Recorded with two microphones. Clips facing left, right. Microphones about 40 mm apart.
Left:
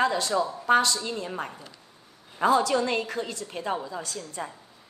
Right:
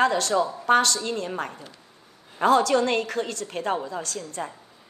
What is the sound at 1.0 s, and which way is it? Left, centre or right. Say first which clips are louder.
Speech: right 4 dB; right.